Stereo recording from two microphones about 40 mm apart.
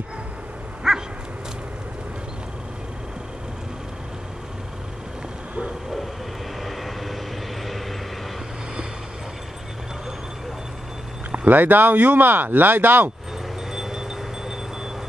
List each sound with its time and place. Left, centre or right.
0.8 s dog: centre
6.6 s vehicle: centre
11.4 s speech: right
13.7 s wind chime: centre